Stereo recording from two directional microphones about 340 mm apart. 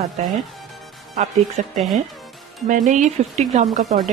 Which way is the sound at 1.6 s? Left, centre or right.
Right.